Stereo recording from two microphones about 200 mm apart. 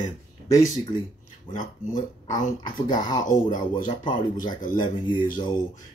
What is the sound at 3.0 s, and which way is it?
Speech, 20° left (ahead or behind).